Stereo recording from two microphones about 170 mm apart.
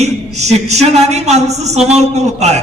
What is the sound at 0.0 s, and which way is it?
A man's voice, 40° right (ahead or behind).